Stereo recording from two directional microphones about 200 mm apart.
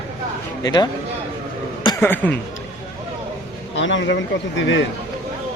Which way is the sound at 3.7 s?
65° left (ahead or behind).